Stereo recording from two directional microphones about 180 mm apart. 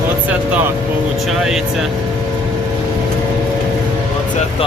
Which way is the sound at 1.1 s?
Centre (ahead or behind).